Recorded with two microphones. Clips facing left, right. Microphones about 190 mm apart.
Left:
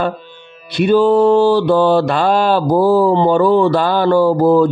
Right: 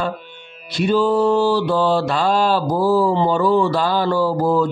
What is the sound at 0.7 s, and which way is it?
Speech, 60° left (ahead or behind).